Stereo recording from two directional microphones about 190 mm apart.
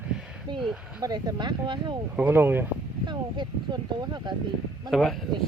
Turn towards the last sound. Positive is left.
turn(degrees=0)  # may be behind; listen again after turning